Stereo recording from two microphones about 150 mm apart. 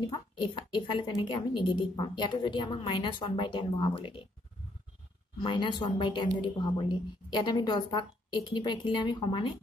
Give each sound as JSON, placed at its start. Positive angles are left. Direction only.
{"t": 0.0, "sound": "a woman's voice", "side_deg": 30}
{"t": 5.4, "sound": "speech", "side_deg": 35}